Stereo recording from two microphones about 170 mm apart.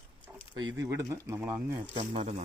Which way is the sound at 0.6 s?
20° right (ahead or behind).